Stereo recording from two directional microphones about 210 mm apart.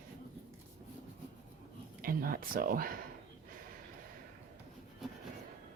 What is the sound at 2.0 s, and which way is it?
Speech, 45° right (ahead or behind).